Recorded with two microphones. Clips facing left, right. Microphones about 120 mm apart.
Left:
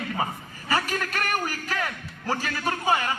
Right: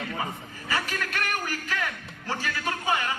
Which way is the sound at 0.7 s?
40° left (ahead or behind).